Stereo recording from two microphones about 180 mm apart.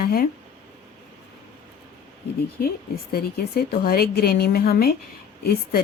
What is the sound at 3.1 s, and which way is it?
A woman's voice, 55° left (ahead or behind).